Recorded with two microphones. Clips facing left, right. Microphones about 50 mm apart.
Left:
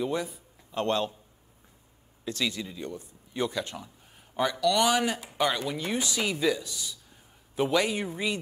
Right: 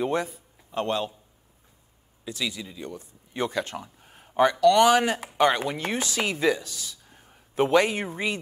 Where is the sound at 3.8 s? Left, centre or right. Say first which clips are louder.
Right 3 dB; right.